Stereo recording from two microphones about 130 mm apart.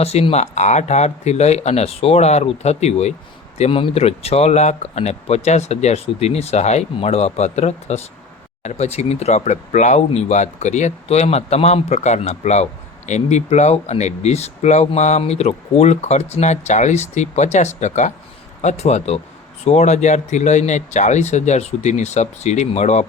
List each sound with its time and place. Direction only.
0.0 s speech: 55° left (ahead or behind)
3.6 s speech: 45° left (ahead or behind); by 23.0 s 60° left (ahead or behind)